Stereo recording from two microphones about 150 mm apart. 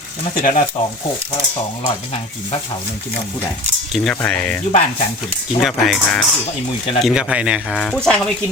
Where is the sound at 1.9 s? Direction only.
40° left (ahead or behind).